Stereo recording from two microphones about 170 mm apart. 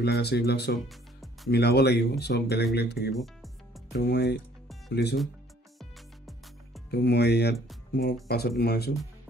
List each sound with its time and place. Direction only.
0.0 s speech: 75° left (ahead or behind)
0.8 s music: centre (ahead or behind)
1.5 s speech: 75° left (ahead or behind)
5.8 s music: centre (ahead or behind)
6.9 s speech: 75° left (ahead or behind)